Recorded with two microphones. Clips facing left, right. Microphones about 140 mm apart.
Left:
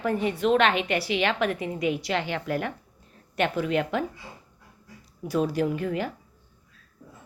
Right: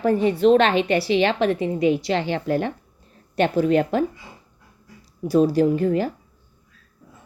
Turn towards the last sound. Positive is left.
turn(degrees=-35)  # may be behind; listen again after turning